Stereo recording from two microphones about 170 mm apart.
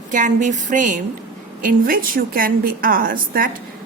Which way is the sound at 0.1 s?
45° right (ahead or behind).